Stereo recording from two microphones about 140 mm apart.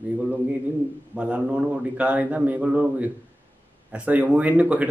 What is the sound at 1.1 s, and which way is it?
Speech, 10° right (ahead or behind).